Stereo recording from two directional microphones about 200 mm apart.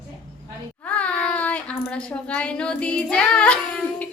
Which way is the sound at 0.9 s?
5° left (ahead or behind).